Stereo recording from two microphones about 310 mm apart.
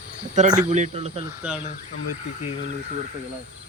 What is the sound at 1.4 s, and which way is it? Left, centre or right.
Speech, centre.